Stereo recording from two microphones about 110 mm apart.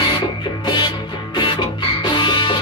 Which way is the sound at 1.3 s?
50° left (ahead or behind).